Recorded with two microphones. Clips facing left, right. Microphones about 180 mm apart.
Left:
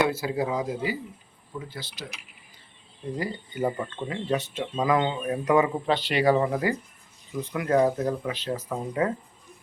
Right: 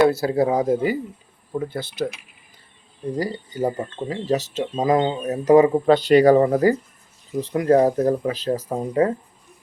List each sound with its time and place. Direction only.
0.0 s speech: 40° right (ahead or behind)
3.1 s speech: 40° right (ahead or behind)